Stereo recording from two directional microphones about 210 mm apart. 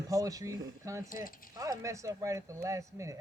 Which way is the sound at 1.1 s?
40° left (ahead or behind).